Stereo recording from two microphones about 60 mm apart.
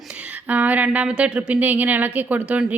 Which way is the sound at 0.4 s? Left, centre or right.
Right.